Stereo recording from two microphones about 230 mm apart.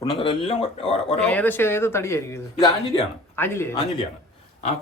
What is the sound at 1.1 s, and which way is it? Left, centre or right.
Speech, centre.